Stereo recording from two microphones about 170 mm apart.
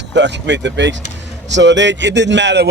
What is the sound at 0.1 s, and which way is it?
Speech, 90° right.